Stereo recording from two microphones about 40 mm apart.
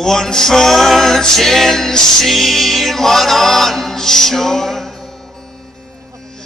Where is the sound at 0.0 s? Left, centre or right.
Centre.